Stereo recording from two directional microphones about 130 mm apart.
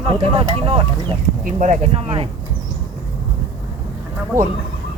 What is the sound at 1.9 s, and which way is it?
Speech, 45° right (ahead or behind).